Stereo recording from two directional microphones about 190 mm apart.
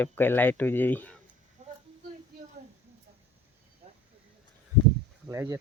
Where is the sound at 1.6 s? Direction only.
40° right (ahead or behind).